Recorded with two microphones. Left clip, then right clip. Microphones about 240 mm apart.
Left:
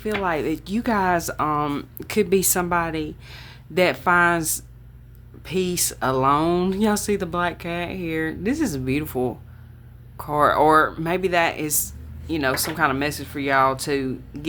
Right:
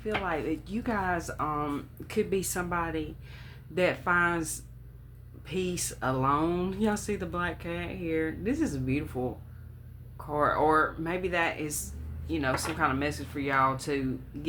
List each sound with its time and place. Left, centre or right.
0.0 s speech: left